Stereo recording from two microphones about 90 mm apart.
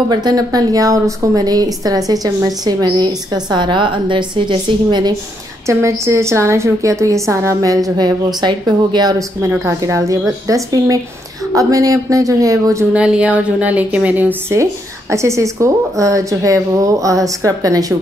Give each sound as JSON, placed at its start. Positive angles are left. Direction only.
{"t": 0.1, "sound": "speech", "side_deg": -45}
{"t": 5.7, "sound": "a woman's voice", "side_deg": -30}
{"t": 8.4, "sound": "speech", "side_deg": -55}
{"t": 9.7, "sound": "a woman's voice", "side_deg": -35}
{"t": 12.9, "sound": "speech", "side_deg": -10}
{"t": 14.5, "sound": "a woman's voice", "side_deg": -35}